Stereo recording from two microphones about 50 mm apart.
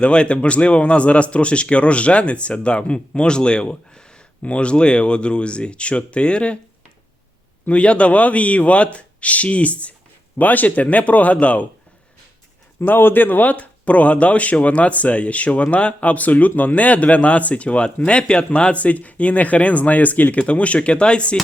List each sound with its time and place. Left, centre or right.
0.0 s speech: left
7.7 s speech: left
12.8 s speech: left